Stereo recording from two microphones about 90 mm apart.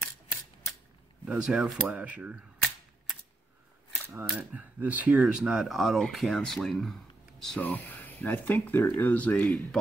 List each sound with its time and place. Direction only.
0.0 s camera: 25° left (ahead or behind)
1.2 s speech: 10° right (ahead or behind)
4.4 s speech: 20° right (ahead or behind); by 7.6 s 5° left (ahead or behind)
7.6 s speech: 20° left (ahead or behind)